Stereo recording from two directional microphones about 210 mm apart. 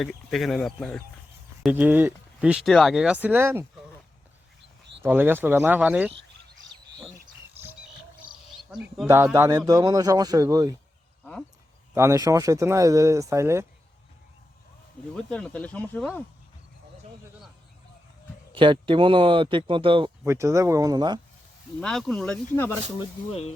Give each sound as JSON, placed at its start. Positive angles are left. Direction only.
{"t": 0.0, "sound": "speech", "side_deg": 0}
{"t": 1.6, "sound": "speech", "side_deg": -10}
{"t": 5.0, "sound": "speech", "side_deg": -10}
{"t": 8.7, "sound": "speech", "side_deg": -5}
{"t": 11.9, "sound": "speech", "side_deg": -15}
{"t": 15.1, "sound": "speech", "side_deg": 5}
{"t": 18.5, "sound": "speech", "side_deg": -25}
{"t": 20.2, "sound": "speech", "side_deg": -15}
{"t": 21.8, "sound": "speech", "side_deg": 5}
{"t": 23.0, "sound": "speech", "side_deg": 30}